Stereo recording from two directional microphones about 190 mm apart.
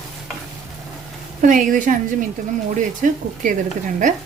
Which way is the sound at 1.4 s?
45° right (ahead or behind).